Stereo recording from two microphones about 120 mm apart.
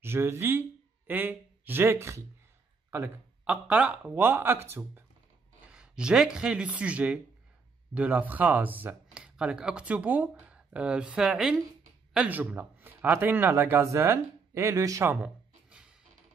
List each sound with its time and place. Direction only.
0.0 s speech: 20° right (ahead or behind)
5.7 s speech: 5° right (ahead or behind); by 15.0 s 25° right (ahead or behind)
15.0 s a sound: 10° right (ahead or behind)